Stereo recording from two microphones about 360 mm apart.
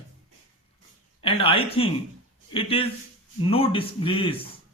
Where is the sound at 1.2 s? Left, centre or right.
Centre.